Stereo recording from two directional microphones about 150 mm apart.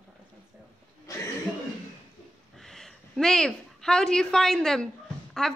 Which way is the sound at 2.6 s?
Centre (ahead or behind).